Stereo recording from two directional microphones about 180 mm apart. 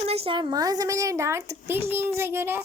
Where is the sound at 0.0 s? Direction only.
35° right (ahead or behind).